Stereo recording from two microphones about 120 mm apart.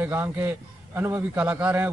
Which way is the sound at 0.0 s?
15° right (ahead or behind).